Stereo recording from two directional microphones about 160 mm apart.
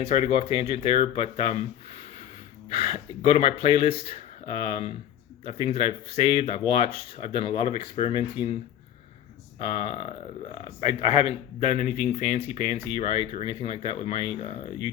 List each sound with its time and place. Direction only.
0.1 s speech: 40° left (ahead or behind)
2.7 s speech: 40° left (ahead or behind)
9.6 s speech: 35° left (ahead or behind)